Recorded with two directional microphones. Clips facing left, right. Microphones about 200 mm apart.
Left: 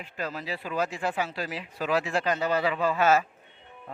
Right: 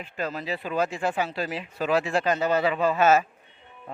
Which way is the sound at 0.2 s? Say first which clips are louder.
Right 3 dB; 25° right (ahead or behind).